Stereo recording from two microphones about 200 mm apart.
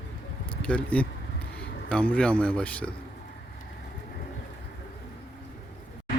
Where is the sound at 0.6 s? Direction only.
5° left (ahead or behind).